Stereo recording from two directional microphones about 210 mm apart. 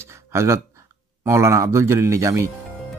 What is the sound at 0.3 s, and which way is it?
Speech, 15° right (ahead or behind).